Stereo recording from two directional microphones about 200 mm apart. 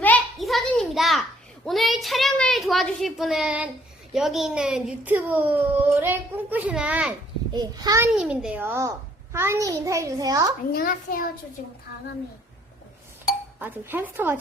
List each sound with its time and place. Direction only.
0.0 s a sound: 5° left (ahead or behind)
1.6 s a woman's voice: centre (ahead or behind)
7.5 s a child's voice: 20° right (ahead or behind)
10.7 s a child's voice: 45° left (ahead or behind)
13.6 s a child's voice: 10° right (ahead or behind)